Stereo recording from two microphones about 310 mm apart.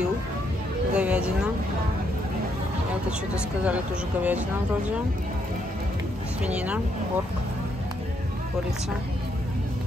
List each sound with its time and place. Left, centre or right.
0.9 s speech: centre
3.6 s speech: centre
6.4 s speech: centre